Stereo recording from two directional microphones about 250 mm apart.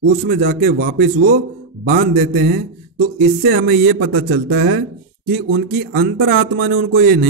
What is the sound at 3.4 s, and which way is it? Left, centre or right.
Speech, right.